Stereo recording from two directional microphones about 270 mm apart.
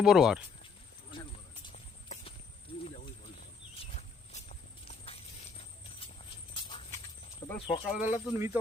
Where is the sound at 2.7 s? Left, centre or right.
Centre.